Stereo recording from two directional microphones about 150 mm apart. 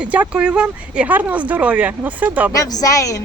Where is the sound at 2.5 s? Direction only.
25° left (ahead or behind).